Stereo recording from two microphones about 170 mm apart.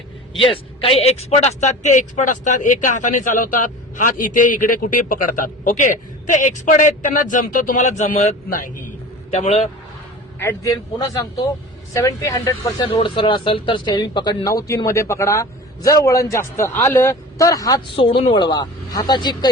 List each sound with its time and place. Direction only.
0.3 s speech: 30° left (ahead or behind); by 8.7 s 50° left (ahead or behind)
9.3 s a man's voice: 40° left (ahead or behind)
10.6 s speech: 20° left (ahead or behind)
17.9 s speech: 30° left (ahead or behind)